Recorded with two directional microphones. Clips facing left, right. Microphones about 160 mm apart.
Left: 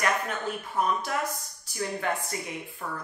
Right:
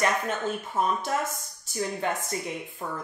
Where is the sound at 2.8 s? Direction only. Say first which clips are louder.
Right 2 dB; 25° right (ahead or behind).